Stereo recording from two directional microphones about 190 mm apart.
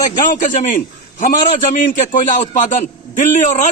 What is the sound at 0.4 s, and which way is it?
A man's voice, 40° left (ahead or behind).